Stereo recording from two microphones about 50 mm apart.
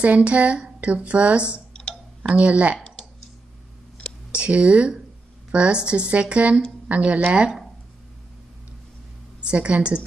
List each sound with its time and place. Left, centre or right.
0.0 s a woman's voice: right
1.7 s tick: centre
2.2 s a woman's voice: right
4.3 s a woman's voice: right
9.4 s a woman's voice: right